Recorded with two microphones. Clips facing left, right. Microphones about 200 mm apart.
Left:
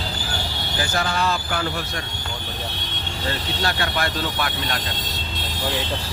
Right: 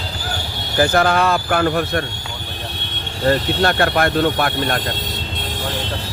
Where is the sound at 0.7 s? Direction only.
60° right (ahead or behind).